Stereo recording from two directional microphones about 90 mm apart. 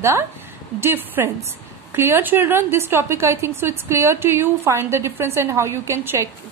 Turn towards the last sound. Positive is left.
turn(degrees=-30)  # may be behind; listen again after turning